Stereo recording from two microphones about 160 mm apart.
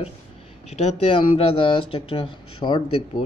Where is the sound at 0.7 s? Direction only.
40° left (ahead or behind).